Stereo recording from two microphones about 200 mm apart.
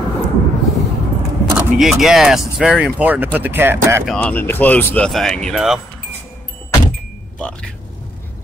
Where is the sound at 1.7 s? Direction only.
Centre (ahead or behind).